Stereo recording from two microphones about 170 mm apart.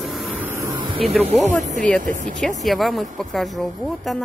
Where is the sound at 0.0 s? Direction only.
Centre (ahead or behind); by 0.7 s 15° right (ahead or behind).